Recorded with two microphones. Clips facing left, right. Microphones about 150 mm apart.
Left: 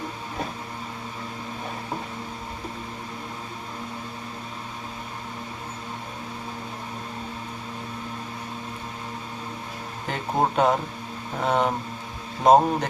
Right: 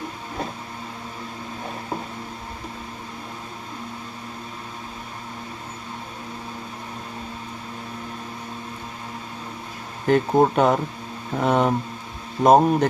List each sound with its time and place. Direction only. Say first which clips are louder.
10.1 s speech: right 8 dB; 55° right (ahead or behind)